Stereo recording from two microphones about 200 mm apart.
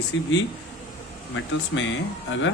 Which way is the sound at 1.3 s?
70° left (ahead or behind).